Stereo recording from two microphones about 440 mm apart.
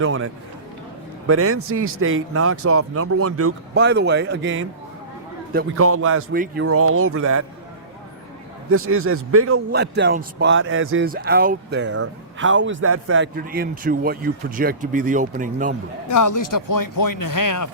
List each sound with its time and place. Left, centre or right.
0.0 s a man's voice: right
1.3 s a man's voice: right
8.7 s a man's voice: right
16.0 s speech: left